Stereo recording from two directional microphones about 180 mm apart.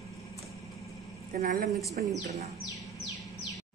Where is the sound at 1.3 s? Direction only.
50° right (ahead or behind).